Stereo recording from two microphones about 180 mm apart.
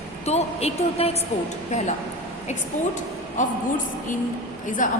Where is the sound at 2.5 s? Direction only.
45° left (ahead or behind).